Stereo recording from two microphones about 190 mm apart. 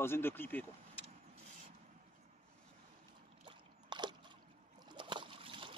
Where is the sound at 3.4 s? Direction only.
25° right (ahead or behind).